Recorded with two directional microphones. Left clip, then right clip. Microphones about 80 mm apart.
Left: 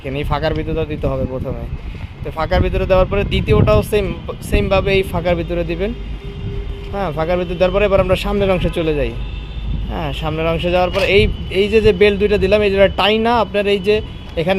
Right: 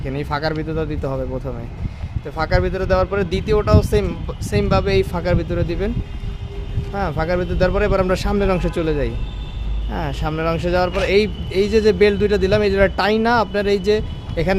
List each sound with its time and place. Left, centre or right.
0.1 s speech: centre
5.4 s speech: centre
6.9 s speech: centre
9.9 s speech: centre